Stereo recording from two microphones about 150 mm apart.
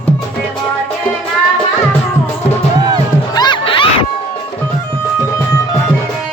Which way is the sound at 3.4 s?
30° left (ahead or behind).